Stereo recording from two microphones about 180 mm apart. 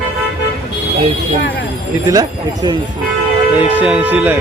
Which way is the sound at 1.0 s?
35° right (ahead or behind).